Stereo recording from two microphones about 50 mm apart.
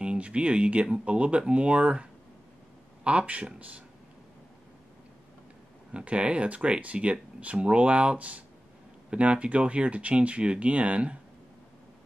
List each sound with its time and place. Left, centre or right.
0.0 s speech: right
5.9 s speech: right